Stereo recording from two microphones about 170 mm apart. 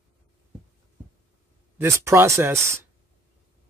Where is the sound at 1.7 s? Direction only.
15° right (ahead or behind).